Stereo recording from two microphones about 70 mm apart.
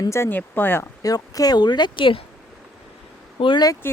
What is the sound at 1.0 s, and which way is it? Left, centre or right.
Speech, left.